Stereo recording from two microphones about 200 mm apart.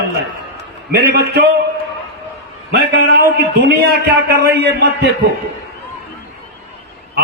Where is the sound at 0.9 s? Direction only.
55° right (ahead or behind).